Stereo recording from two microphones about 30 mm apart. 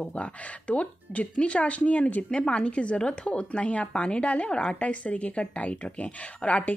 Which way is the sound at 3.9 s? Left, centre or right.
Left.